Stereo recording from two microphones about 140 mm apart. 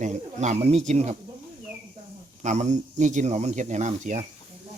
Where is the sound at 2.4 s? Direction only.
60° right (ahead or behind).